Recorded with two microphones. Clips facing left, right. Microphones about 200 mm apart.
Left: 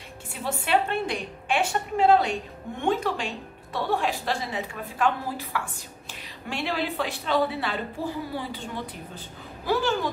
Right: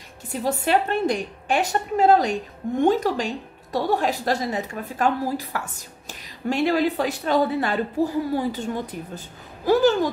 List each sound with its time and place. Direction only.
0.3 s a woman's voice: 40° right (ahead or behind)